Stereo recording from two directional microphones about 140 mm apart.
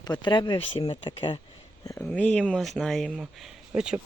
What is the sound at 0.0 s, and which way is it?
Speech, 30° left (ahead or behind).